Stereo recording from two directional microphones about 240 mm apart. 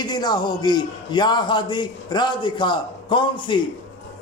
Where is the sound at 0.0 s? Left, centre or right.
Centre.